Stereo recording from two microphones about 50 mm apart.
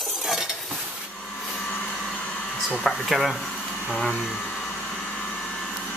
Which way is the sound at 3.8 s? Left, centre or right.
Centre.